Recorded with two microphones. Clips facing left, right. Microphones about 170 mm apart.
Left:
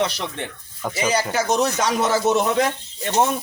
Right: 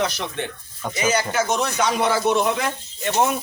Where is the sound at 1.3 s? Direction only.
35° left (ahead or behind).